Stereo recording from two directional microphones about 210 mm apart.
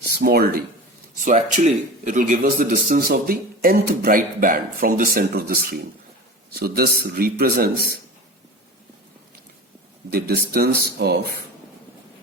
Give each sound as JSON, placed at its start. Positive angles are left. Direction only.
{"t": 0.2, "sound": "speech", "side_deg": -45}
{"t": 1.2, "sound": "a man's voice", "side_deg": -35}
{"t": 10.1, "sound": "speech", "side_deg": -45}